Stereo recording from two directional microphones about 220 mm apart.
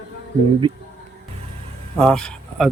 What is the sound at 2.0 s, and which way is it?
Speech, 5° left (ahead or behind).